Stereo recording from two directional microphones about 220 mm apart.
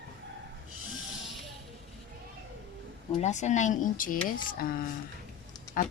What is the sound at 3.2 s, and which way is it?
Speech, 35° left (ahead or behind).